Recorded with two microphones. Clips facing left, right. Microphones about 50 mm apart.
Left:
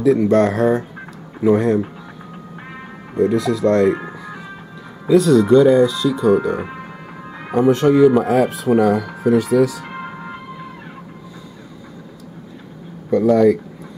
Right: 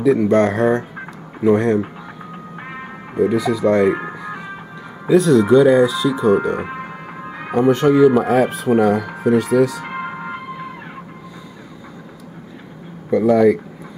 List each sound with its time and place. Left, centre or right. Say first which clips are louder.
0.0 s speech: even; centre
2.3 s music: right 3 dB; centre
3.2 s speech: even; centre
4.0 s music: right 3 dB; centre
5.1 s speech: even; centre
6.6 s music: right 2 dB; centre
7.5 s speech: even; centre
9.8 s music: right 4 dB; centre
13.3 s speech: even; centre